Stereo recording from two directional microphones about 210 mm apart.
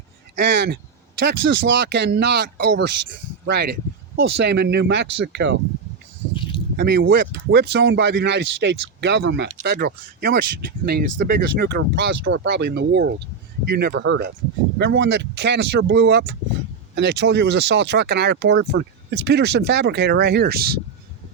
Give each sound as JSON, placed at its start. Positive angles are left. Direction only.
{"t": 0.3, "sound": "speech", "side_deg": -50}
{"t": 6.3, "sound": "a sound", "side_deg": 25}
{"t": 6.7, "sound": "speech", "side_deg": -45}